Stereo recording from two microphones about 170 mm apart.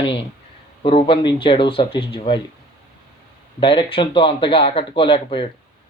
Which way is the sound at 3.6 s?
30° left (ahead or behind).